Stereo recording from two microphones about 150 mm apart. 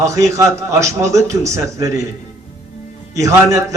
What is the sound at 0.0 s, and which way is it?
A man's voice, 20° right (ahead or behind).